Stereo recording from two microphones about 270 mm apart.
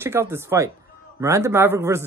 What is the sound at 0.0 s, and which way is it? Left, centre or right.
Speech, centre.